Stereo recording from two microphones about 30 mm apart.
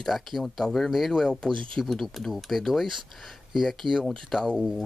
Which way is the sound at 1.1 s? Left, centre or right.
Centre.